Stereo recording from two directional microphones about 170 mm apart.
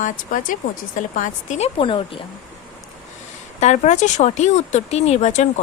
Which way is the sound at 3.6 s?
40° left (ahead or behind).